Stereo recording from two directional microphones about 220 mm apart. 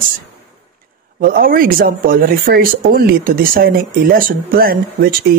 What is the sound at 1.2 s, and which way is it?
Speech, 40° right (ahead or behind).